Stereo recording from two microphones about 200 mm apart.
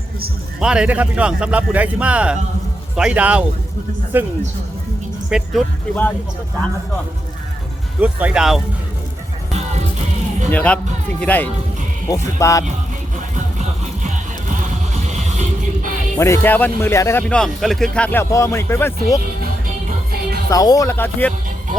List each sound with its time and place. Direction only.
0.6 s a man's voice: 5° right (ahead or behind)
5.3 s speech: centre (ahead or behind)
8.0 s speech: 5° right (ahead or behind)
10.5 s speech: 5° left (ahead or behind)
13.3 s music: 40° right (ahead or behind)
16.1 s speech: 15° left (ahead or behind)
20.5 s speech: 15° left (ahead or behind)